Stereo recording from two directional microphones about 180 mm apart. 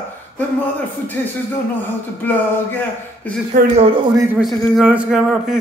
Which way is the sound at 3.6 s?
50° right (ahead or behind).